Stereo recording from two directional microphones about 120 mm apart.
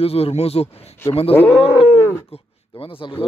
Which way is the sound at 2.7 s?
45° left (ahead or behind).